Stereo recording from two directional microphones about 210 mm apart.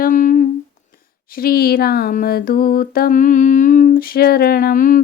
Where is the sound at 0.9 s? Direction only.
45° left (ahead or behind).